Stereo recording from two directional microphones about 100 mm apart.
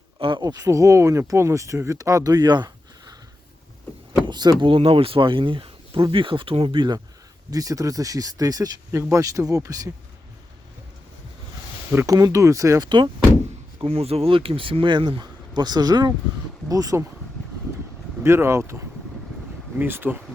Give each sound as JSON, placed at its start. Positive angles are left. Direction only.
{"t": 0.2, "sound": "speech", "side_deg": -55}
{"t": 0.4, "sound": "speech", "side_deg": -40}
{"t": 4.3, "sound": "speech", "side_deg": -45}
{"t": 4.6, "sound": "speech", "side_deg": -65}
{"t": 7.5, "sound": "speech", "side_deg": -35}
{"t": 11.9, "sound": "speech", "side_deg": -30}
{"t": 13.7, "sound": "speech", "side_deg": -80}
{"t": 18.2, "sound": "speech", "side_deg": -25}
{"t": 19.8, "sound": "speech", "side_deg": -20}